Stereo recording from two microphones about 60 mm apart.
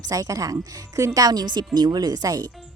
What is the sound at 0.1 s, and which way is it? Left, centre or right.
Speech, right.